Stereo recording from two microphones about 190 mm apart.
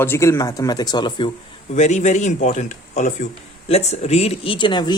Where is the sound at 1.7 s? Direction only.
40° left (ahead or behind).